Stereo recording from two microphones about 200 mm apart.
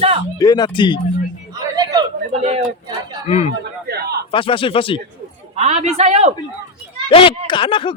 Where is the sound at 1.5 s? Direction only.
20° right (ahead or behind).